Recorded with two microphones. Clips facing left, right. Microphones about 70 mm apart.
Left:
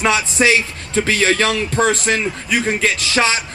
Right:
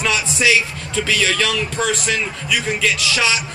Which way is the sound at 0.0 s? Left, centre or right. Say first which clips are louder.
Left 3 dB; left.